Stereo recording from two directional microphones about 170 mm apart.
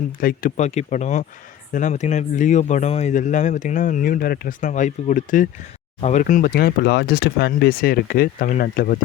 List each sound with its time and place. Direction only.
0.2 s speech: 55° left (ahead or behind)
6.5 s speech: 65° left (ahead or behind)